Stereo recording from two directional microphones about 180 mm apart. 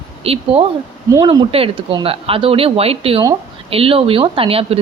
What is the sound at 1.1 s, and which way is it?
Speech, 25° right (ahead or behind).